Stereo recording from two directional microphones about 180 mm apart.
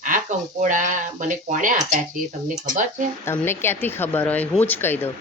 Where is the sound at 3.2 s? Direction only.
15° left (ahead or behind).